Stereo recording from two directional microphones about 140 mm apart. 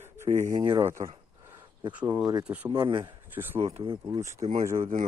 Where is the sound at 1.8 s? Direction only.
30° right (ahead or behind).